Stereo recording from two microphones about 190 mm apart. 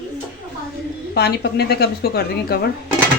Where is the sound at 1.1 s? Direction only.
60° left (ahead or behind).